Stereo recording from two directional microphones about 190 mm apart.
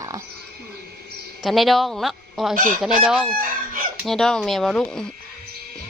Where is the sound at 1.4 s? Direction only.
Centre (ahead or behind).